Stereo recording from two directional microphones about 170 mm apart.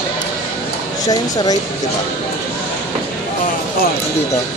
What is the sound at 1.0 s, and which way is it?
Speech, 20° left (ahead or behind).